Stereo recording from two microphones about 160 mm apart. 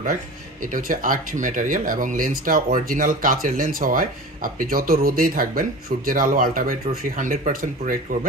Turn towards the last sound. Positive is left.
turn(degrees=-60)  # may be behind; listen again after turning